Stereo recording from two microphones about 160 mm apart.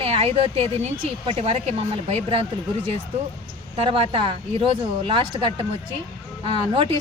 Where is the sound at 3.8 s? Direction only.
35° right (ahead or behind).